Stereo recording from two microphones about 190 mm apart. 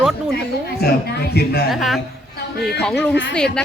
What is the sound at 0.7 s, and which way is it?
Speech, 60° left (ahead or behind).